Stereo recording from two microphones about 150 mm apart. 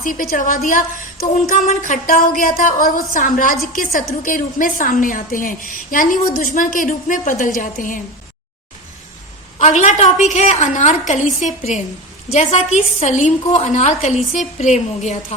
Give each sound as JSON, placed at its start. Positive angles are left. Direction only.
{"t": 0.0, "sound": "a woman's voice", "side_deg": 65}
{"t": 9.6, "sound": "a woman's voice", "side_deg": 50}